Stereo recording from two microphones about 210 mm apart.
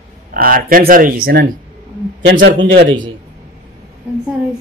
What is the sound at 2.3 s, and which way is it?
Speech, 65° right (ahead or behind).